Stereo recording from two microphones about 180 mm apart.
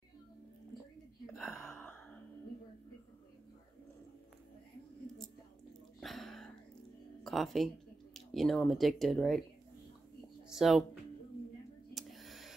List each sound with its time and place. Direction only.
1.2 s gasp: centre (ahead or behind)
1.6 s gasp: 10° left (ahead or behind)
5.2 s whispering: centre (ahead or behind)
7.2 s speech: centre (ahead or behind)
10.5 s speech: centre (ahead or behind)
11.9 s a sound: centre (ahead or behind)